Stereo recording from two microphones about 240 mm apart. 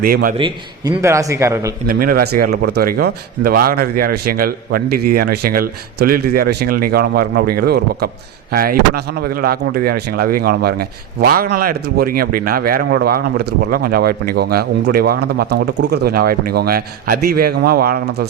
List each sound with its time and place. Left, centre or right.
0.0 s speech: right
0.3 s a man's voice: centre
1.9 s speech: right